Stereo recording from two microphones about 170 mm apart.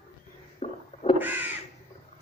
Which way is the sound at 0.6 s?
40° left (ahead or behind).